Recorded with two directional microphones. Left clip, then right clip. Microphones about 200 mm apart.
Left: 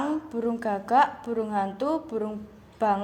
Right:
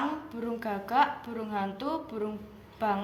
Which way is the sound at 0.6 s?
55° left (ahead or behind).